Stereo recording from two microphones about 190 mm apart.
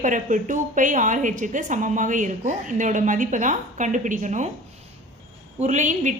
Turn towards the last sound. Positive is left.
turn(degrees=-40)  # may be behind; listen again after turning